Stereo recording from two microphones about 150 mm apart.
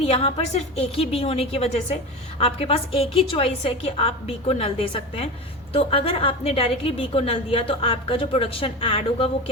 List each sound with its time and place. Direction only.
0.0 s a woman's voice: 40° left (ahead or behind)